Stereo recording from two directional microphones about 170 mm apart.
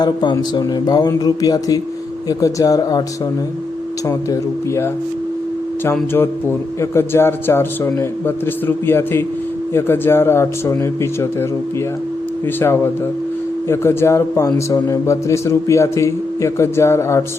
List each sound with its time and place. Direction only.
0.0 s speech: 25° left (ahead or behind)
4.3 s speech: 15° left (ahead or behind)
12.5 s speech: 15° left (ahead or behind)